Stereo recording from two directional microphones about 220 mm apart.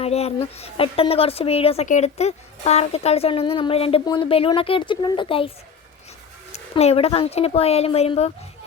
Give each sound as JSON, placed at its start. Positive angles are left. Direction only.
{"t": 0.0, "sound": "a woman's voice", "side_deg": 30}
{"t": 6.5, "sound": "a woman's voice", "side_deg": 30}